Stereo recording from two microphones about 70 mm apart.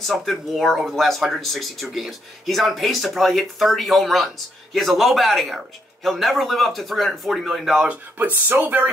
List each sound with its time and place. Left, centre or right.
0.0 s speech: centre
8.5 s speech: right